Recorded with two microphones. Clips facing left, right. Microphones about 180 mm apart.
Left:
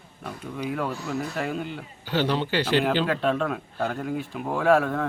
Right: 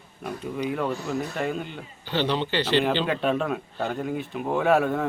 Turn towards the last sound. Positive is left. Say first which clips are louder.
# even
turn(degrees=-5)  # may be behind; listen again after turning